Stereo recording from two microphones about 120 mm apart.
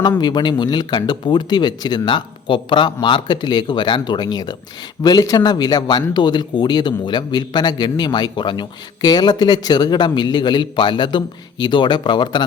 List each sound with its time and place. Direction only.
0.2 s a man's voice: 35° left (ahead or behind)